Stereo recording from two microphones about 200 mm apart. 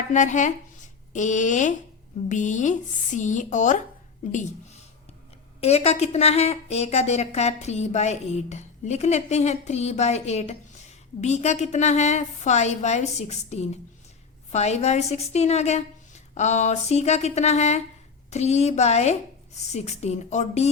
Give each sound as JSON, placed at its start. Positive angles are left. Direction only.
{"t": 0.1, "sound": "a woman's voice", "side_deg": 40}
{"t": 5.5, "sound": "a woman's voice", "side_deg": 30}